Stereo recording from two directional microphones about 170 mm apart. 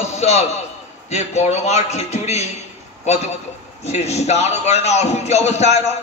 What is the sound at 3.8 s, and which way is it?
A man's voice, 40° left (ahead or behind).